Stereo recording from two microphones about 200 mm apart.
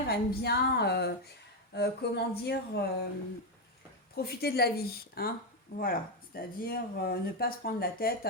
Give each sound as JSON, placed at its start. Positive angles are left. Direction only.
{"t": 0.1, "sound": "a woman's voice", "side_deg": 55}
{"t": 4.1, "sound": "speech", "side_deg": 50}